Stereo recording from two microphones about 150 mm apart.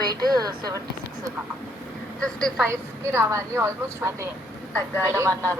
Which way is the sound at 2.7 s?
15° right (ahead or behind).